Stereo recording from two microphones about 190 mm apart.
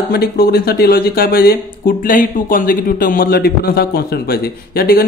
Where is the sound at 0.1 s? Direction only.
55° left (ahead or behind).